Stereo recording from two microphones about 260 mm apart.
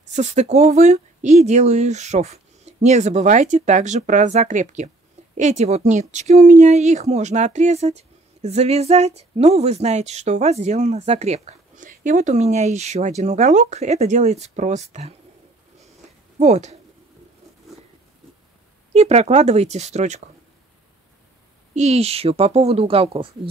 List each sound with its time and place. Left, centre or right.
0.0 s speech: right
16.3 s speech: right
18.9 s speech: right
21.7 s speech: right